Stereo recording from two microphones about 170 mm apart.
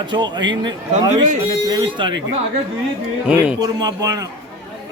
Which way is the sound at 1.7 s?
25° right (ahead or behind).